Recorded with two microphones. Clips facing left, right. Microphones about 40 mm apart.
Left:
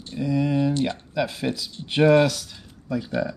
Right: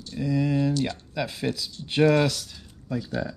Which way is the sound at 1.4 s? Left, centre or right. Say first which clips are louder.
Left 2 dB; left.